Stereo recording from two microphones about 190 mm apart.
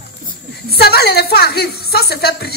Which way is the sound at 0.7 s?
55° left (ahead or behind).